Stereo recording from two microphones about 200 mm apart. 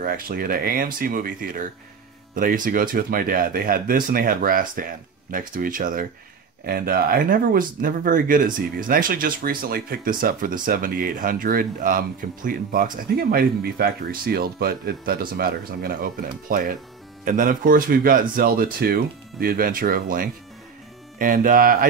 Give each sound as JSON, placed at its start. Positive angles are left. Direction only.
{"t": 0.0, "sound": "speech", "side_deg": -45}